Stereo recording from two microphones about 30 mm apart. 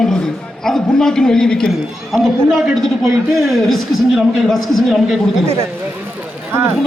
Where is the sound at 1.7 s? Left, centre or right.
Centre.